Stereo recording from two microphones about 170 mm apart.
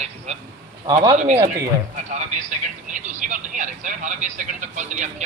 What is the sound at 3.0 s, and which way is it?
Speech, 45° right (ahead or behind).